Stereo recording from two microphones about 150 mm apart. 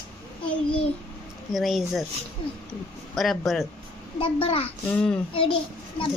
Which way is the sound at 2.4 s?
35° left (ahead or behind).